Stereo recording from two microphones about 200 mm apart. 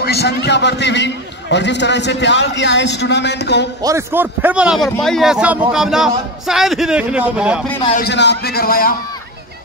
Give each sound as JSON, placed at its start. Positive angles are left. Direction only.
{"t": 0.0, "sound": "a man's voice", "side_deg": 55}
{"t": 3.8, "sound": "a man's voice", "side_deg": -10}
{"t": 7.9, "sound": "speech", "side_deg": 55}